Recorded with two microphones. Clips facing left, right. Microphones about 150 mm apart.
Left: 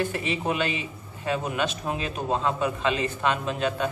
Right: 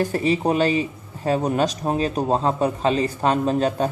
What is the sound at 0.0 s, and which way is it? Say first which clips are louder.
A man's voice: right 7 dB; 40° right (ahead or behind).